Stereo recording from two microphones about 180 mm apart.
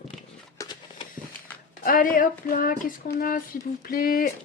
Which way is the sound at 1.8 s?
50° left (ahead or behind).